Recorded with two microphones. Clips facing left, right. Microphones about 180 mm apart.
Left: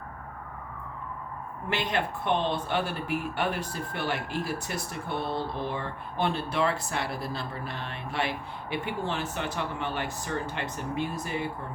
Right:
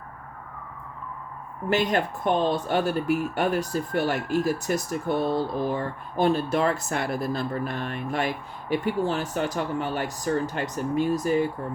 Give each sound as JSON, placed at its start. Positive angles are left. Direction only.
{"t": 1.7, "sound": "speech", "side_deg": -45}